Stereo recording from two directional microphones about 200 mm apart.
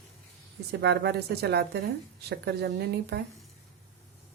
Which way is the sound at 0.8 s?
55° right (ahead or behind).